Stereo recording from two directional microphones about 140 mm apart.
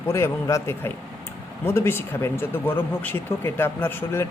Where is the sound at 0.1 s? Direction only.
20° left (ahead or behind).